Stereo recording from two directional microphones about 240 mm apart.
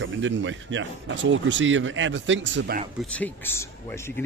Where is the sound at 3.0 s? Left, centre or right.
Centre.